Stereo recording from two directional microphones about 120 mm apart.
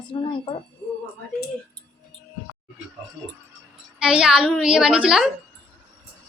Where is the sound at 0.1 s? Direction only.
45° left (ahead or behind).